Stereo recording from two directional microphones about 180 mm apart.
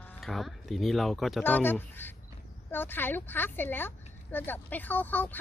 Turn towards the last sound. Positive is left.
turn(degrees=10)  # may be behind; listen again after turning